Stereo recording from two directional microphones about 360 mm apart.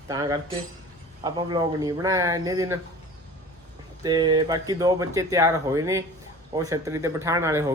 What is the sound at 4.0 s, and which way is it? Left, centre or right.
Speech, centre.